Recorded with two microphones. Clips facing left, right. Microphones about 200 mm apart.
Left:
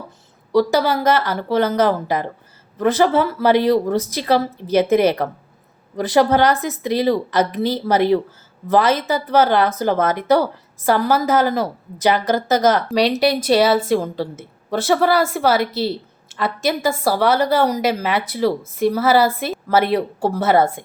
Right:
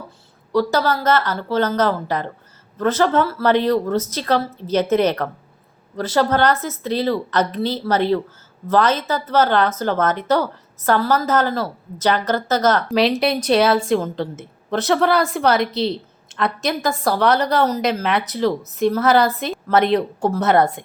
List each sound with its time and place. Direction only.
0.5 s a woman's voice: 15° left (ahead or behind)
12.9 s a woman's voice: centre (ahead or behind)